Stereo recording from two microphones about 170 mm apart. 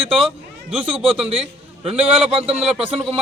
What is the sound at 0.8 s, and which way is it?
A man's voice, 35° right (ahead or behind).